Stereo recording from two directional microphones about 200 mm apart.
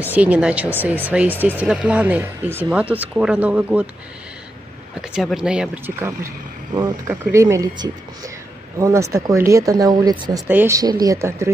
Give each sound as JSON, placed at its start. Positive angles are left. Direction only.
{"t": 0.0, "sound": "speech", "side_deg": -5}
{"t": 5.1, "sound": "speech", "side_deg": -5}